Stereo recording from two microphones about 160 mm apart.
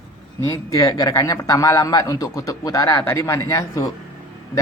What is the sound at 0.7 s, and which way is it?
Speech, 20° left (ahead or behind).